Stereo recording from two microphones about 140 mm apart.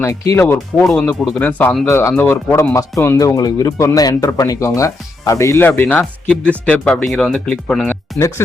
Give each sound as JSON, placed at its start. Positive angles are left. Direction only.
{"t": 0.0, "sound": "speech", "side_deg": 20}